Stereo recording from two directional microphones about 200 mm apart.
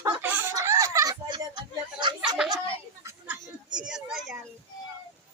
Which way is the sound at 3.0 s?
15° right (ahead or behind).